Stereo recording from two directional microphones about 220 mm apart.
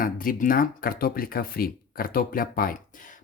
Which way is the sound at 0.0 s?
40° left (ahead or behind).